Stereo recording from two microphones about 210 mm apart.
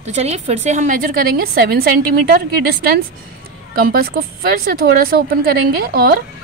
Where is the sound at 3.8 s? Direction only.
45° right (ahead or behind).